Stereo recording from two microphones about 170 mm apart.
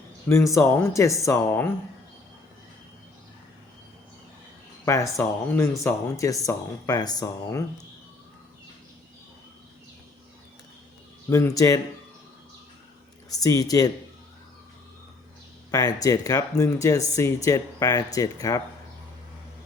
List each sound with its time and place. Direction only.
0.3 s speech: 15° left (ahead or behind)
5.1 s speech: 15° left (ahead or behind)
11.3 s speech: 20° left (ahead or behind)
13.3 s speech: 20° left (ahead or behind)
15.7 s speech: 20° left (ahead or behind)